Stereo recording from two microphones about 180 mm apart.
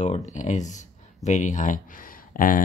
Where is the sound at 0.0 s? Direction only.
40° left (ahead or behind).